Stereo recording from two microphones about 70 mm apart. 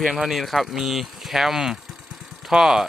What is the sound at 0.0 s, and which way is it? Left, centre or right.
Speech, centre.